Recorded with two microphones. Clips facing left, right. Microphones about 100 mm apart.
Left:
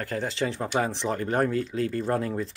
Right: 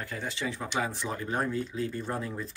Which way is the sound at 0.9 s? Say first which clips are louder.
Left 6 dB; 60° left (ahead or behind).